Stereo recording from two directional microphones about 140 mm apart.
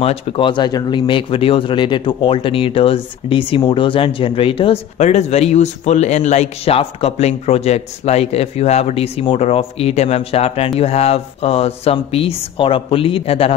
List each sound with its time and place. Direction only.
0.0 s speech: 40° left (ahead or behind)
4.9 s speech: 55° left (ahead or behind)